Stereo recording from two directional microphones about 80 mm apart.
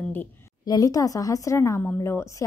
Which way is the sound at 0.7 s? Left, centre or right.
Left.